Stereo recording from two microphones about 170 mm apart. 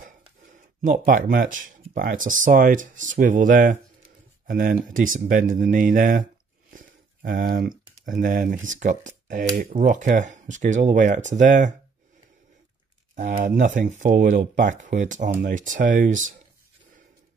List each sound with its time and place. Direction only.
0.0 s speech: 50° right (ahead or behind)
13.1 s speech: 50° right (ahead or behind)